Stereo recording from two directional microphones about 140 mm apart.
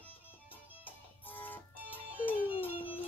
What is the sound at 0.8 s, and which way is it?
Music, 10° left (ahead or behind).